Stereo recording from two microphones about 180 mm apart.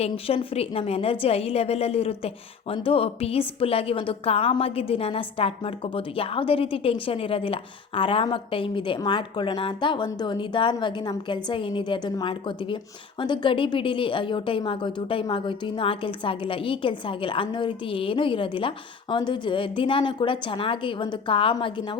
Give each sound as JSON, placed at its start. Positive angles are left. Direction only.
{"t": 0.0, "sound": "a woman's voice", "side_deg": 30}